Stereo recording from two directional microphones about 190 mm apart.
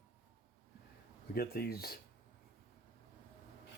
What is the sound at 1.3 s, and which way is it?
Speech, 55° left (ahead or behind).